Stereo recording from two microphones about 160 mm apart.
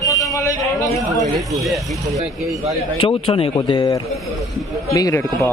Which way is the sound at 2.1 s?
20° right (ahead or behind).